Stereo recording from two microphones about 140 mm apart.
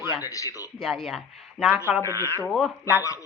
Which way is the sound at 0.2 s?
25° left (ahead or behind).